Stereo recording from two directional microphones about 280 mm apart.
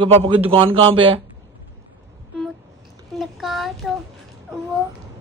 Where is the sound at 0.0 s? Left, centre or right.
Centre.